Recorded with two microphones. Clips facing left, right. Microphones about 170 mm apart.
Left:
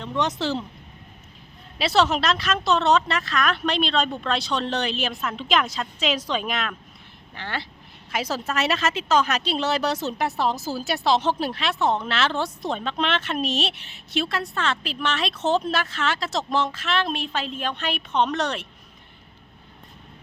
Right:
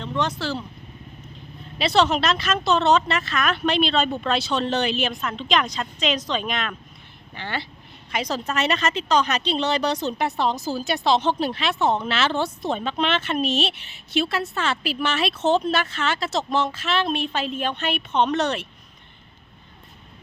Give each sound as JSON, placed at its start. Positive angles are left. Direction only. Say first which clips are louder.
{"t": 0.0, "sound": "speech", "louder": "left 1 dB", "side_deg": 15}
{"t": 1.8, "sound": "a woman's voice", "louder": "right 1 dB", "side_deg": 5}